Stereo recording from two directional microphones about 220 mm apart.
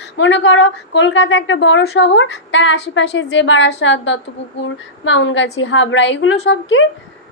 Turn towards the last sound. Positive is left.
turn(degrees=60)  # may be behind; listen again after turning